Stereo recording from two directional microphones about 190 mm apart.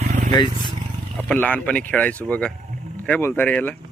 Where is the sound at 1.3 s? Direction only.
5° left (ahead or behind).